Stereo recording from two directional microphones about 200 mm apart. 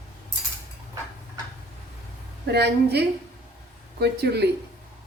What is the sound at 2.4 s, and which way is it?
A woman's voice, 55° right (ahead or behind).